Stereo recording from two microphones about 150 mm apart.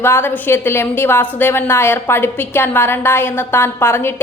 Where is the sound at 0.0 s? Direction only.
15° left (ahead or behind).